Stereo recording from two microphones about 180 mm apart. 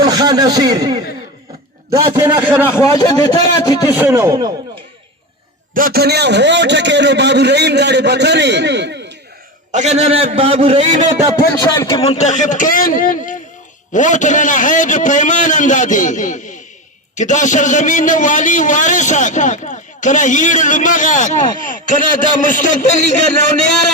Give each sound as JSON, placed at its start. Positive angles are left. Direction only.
{"t": 0.0, "sound": "speech", "side_deg": -20}
{"t": 2.2, "sound": "speech", "side_deg": -10}
{"t": 2.6, "sound": "a man's voice", "side_deg": 10}
{"t": 3.9, "sound": "speech", "side_deg": -15}
{"t": 5.7, "sound": "a man's voice", "side_deg": -55}
{"t": 9.7, "sound": "a man's voice", "side_deg": -40}
{"t": 11.3, "sound": "a man's voice", "side_deg": 20}
{"t": 11.9, "sound": "a man's voice", "side_deg": 35}